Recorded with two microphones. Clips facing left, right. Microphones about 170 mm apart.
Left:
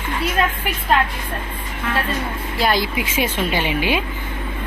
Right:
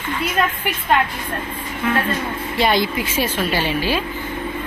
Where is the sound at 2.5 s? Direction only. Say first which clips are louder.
Right 2 dB; centre (ahead or behind).